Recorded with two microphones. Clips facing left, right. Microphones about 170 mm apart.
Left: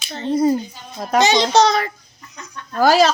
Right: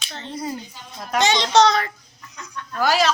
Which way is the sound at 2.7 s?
35° left (ahead or behind).